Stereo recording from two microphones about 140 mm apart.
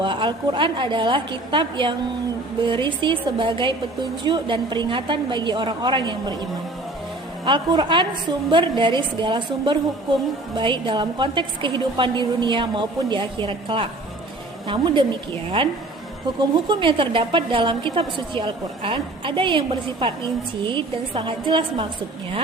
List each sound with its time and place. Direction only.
0.0 s a woman's voice: 35° right (ahead or behind)
7.4 s a woman's voice: 35° right (ahead or behind)
16.4 s a woman's voice: 35° right (ahead or behind)